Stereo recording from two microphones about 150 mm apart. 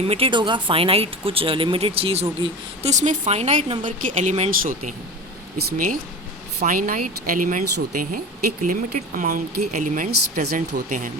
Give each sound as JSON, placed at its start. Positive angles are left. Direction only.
{"t": 0.1, "sound": "speech", "side_deg": -35}
{"t": 2.9, "sound": "speech", "side_deg": -50}
{"t": 5.5, "sound": "speech", "side_deg": -80}